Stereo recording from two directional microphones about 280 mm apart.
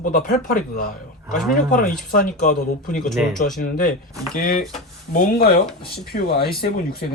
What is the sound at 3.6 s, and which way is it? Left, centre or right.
Speech, left.